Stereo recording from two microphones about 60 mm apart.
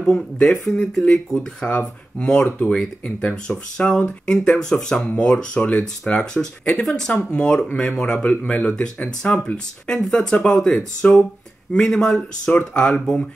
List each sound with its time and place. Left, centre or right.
0.0 s speech: centre
9.8 s speech: centre